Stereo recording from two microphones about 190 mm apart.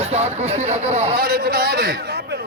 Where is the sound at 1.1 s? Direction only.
55° right (ahead or behind).